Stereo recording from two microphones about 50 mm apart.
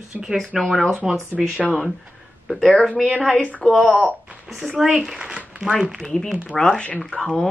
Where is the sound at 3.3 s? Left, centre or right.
Left.